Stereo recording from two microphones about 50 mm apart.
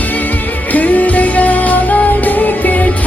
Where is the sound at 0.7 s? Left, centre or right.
Left.